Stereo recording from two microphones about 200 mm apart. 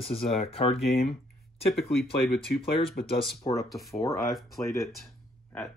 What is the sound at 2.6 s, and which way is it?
Speech, 25° left (ahead or behind).